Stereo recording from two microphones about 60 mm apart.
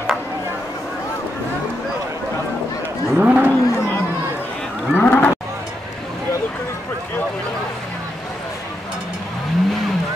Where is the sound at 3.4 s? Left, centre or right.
Left.